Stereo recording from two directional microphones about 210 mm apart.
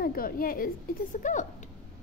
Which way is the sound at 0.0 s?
45° left (ahead or behind).